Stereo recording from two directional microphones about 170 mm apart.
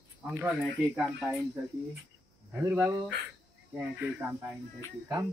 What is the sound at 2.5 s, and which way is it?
Speech, 15° right (ahead or behind).